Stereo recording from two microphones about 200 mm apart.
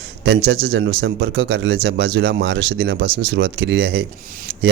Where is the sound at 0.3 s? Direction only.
55° right (ahead or behind).